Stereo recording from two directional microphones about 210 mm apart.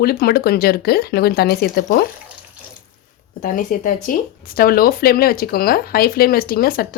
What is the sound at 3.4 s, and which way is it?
Speech, 40° left (ahead or behind).